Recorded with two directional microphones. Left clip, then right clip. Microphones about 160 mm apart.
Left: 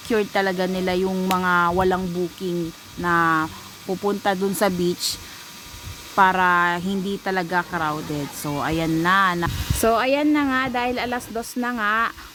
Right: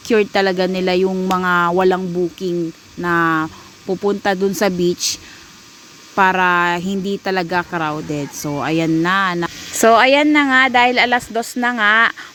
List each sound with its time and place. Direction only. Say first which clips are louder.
0.1 s speech: right 6 dB; 40° right (ahead or behind)